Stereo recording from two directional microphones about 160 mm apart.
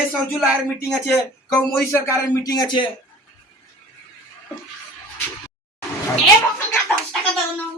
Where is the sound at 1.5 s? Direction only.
15° left (ahead or behind).